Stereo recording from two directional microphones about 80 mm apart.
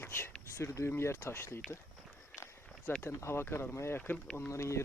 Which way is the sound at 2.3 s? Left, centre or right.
Left.